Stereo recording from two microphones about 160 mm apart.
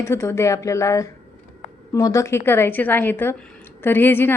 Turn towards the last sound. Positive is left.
turn(degrees=15)  # may be behind; listen again after turning